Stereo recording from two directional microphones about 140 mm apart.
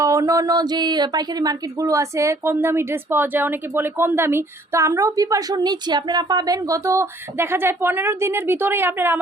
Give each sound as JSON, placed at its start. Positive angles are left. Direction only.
{"t": 0.0, "sound": "speech", "side_deg": -25}